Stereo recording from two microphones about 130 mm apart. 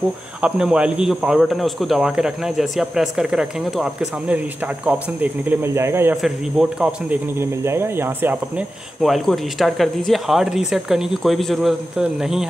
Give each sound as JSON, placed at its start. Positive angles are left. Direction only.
{"t": 0.4, "sound": "speech", "side_deg": -5}
{"t": 6.2, "sound": "speech", "side_deg": -5}
{"t": 7.3, "sound": "speech", "side_deg": -20}
{"t": 9.0, "sound": "speech", "side_deg": 0}